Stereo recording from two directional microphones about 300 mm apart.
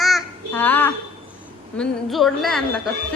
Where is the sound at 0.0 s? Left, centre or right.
Centre.